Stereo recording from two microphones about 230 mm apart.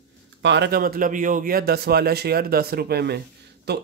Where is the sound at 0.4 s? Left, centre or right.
Right.